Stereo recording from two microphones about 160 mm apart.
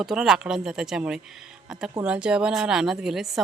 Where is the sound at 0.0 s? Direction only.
Centre (ahead or behind).